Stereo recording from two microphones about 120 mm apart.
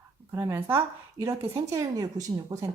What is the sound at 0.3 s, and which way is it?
Speech, 20° right (ahead or behind).